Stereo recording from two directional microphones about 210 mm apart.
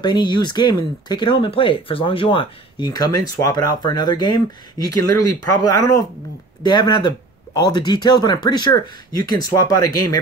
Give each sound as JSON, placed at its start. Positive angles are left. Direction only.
{"t": 0.0, "sound": "speech", "side_deg": 20}